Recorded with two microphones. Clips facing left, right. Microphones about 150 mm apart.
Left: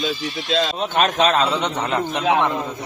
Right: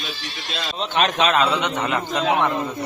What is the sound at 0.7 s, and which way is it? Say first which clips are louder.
Speech: left 2 dB; 50° left (ahead or behind).